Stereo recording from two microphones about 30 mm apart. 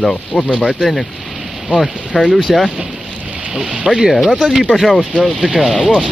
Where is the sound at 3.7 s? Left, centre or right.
Right.